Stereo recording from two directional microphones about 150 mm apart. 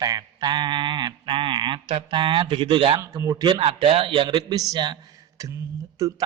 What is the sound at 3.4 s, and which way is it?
A man's voice, 35° right (ahead or behind).